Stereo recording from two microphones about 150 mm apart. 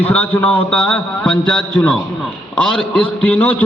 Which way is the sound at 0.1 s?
10° left (ahead or behind).